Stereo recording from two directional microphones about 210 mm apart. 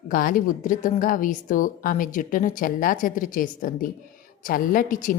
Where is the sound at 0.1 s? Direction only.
40° left (ahead or behind).